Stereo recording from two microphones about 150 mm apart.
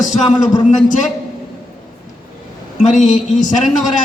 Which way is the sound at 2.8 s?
55° left (ahead or behind).